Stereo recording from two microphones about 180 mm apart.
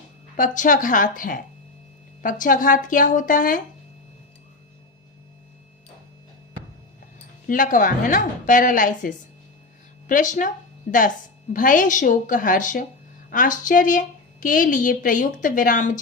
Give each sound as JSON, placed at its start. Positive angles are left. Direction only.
{"t": 0.3, "sound": "a woman's voice", "side_deg": 45}
{"t": 7.4, "sound": "a woman's voice", "side_deg": 50}
{"t": 11.5, "sound": "a woman's voice", "side_deg": 50}